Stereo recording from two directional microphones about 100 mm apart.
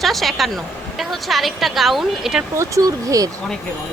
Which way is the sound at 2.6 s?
35° right (ahead or behind).